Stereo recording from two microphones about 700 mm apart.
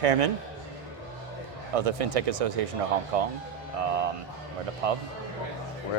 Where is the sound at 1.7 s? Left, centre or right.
Right.